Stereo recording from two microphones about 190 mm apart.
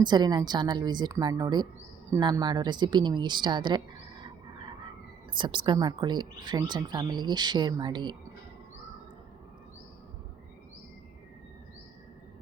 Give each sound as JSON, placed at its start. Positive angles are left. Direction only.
{"t": 0.0, "sound": "speech", "side_deg": -25}
{"t": 5.3, "sound": "speech", "side_deg": -25}